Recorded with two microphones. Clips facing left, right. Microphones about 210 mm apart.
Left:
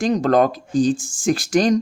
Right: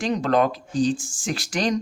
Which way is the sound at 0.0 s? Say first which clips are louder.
Left 4 dB; 45° left (ahead or behind).